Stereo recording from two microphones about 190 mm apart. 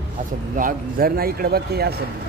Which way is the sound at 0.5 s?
50° right (ahead or behind).